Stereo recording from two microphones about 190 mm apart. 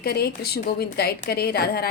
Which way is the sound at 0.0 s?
55° left (ahead or behind).